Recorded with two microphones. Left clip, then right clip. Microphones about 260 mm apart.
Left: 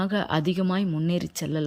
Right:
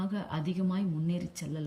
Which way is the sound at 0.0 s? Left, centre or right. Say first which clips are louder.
Left 11 dB; centre.